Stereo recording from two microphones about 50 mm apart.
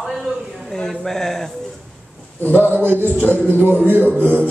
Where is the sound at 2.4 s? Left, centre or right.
Left.